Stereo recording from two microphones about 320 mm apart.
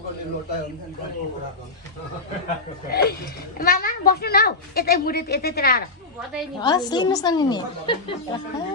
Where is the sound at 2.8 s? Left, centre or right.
Left.